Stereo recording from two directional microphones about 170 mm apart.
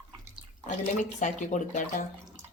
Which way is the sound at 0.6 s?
45° left (ahead or behind).